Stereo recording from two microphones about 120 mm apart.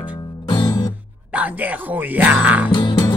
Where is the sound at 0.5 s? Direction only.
40° left (ahead or behind).